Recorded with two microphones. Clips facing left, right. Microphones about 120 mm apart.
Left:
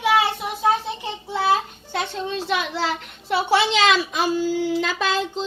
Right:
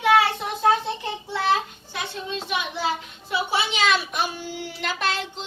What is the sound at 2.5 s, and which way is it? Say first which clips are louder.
A woman's voice: left 1 dB; 90° left.